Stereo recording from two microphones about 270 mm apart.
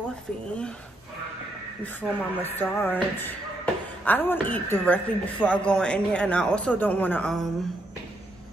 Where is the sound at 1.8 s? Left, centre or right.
Centre.